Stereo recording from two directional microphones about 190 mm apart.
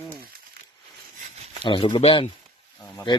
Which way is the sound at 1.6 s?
25° left (ahead or behind).